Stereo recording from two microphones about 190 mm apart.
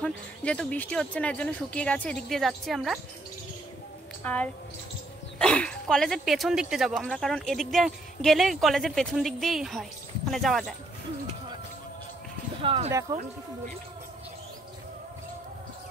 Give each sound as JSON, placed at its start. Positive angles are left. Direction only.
{"t": 0.0, "sound": "speech", "side_deg": 5}
{"t": 4.2, "sound": "a woman's voice", "side_deg": 10}
{"t": 12.6, "sound": "speech", "side_deg": -30}